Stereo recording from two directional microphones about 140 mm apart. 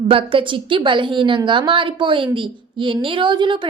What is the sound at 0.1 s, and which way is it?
A woman's voice, 40° right (ahead or behind).